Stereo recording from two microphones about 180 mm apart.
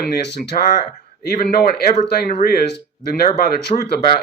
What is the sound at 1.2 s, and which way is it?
Speech, 55° left (ahead or behind).